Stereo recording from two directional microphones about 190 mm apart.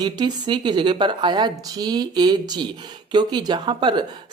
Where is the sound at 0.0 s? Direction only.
20° right (ahead or behind).